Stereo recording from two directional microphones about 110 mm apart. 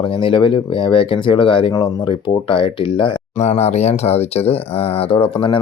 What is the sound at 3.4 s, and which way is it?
Speech, 80° left.